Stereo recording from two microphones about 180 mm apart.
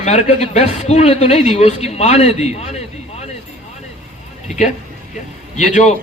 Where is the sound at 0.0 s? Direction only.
40° left (ahead or behind).